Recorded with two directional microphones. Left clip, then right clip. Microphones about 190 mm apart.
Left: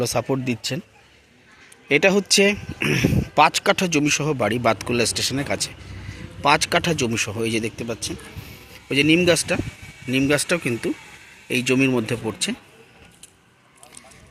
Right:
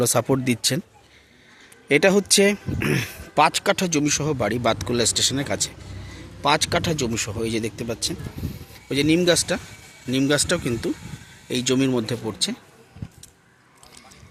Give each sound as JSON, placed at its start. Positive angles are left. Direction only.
{"t": 0.0, "sound": "speech", "side_deg": -15}
{"t": 1.9, "sound": "speech", "side_deg": -10}
{"t": 7.8, "sound": "speech", "side_deg": -10}
{"t": 8.7, "sound": "speech", "side_deg": 5}